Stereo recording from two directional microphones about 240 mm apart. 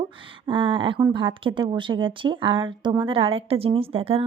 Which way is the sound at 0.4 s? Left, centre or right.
Right.